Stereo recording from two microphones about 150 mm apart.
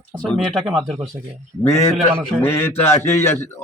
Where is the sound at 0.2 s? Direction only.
5° left (ahead or behind).